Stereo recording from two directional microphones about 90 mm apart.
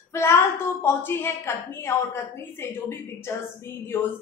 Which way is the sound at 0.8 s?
25° left (ahead or behind).